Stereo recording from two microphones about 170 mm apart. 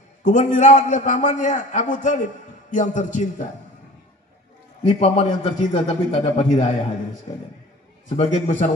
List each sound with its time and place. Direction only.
0.2 s a man's voice: 45° left (ahead or behind)
4.8 s a man's voice: 35° left (ahead or behind)
8.2 s a man's voice: 45° left (ahead or behind)